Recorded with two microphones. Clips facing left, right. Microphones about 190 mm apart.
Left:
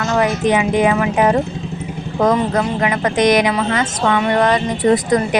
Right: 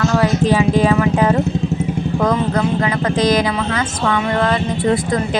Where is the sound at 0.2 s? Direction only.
20° left (ahead or behind).